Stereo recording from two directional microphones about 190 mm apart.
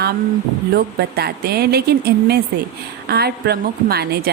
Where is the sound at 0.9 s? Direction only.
55° right (ahead or behind).